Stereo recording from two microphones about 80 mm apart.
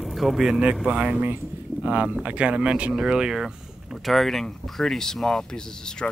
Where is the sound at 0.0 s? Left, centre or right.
Centre.